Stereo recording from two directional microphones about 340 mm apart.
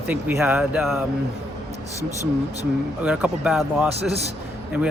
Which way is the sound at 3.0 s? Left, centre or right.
Centre.